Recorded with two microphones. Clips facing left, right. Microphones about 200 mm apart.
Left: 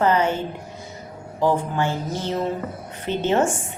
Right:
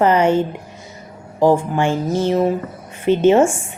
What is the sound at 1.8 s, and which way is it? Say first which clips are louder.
A woman's voice: right 7 dB; 15° right (ahead or behind).